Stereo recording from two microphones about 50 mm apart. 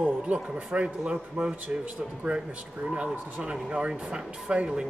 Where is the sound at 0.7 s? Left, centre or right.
Right.